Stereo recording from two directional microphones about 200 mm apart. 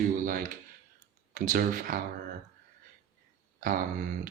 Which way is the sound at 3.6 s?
45° right (ahead or behind).